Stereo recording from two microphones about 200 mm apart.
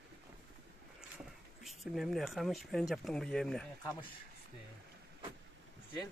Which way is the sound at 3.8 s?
20° left (ahead or behind).